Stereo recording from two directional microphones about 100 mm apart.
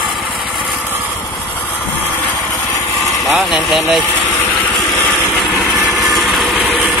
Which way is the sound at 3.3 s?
Centre (ahead or behind).